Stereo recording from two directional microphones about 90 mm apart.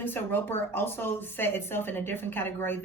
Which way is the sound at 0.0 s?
25° left (ahead or behind).